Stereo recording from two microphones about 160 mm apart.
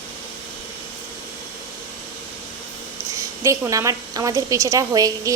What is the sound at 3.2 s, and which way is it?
A woman's voice, 20° right (ahead or behind).